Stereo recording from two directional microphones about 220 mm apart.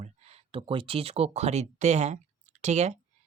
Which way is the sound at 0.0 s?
30° right (ahead or behind).